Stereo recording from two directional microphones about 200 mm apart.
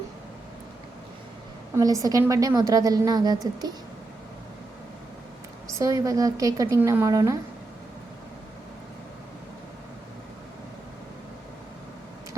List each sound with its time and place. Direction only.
1.7 s a woman's voice: 15° right (ahead or behind)
5.7 s a woman's voice: 15° right (ahead or behind)